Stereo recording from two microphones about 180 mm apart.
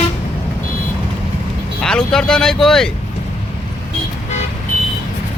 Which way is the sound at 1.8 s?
5° left (ahead or behind).